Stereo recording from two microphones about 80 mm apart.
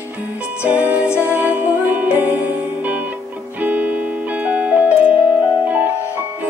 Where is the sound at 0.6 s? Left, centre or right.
Right.